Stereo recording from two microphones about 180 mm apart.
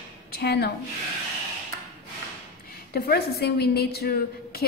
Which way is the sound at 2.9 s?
60° left (ahead or behind).